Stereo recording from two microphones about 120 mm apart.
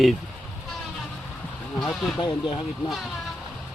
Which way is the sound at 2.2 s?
40° left (ahead or behind).